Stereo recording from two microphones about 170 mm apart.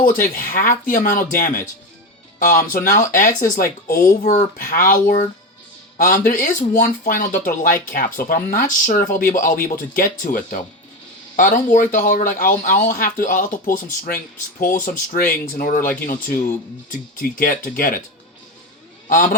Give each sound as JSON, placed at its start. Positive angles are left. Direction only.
{"t": 0.0, "sound": "speech", "side_deg": 55}
{"t": 19.0, "sound": "a man's voice", "side_deg": 50}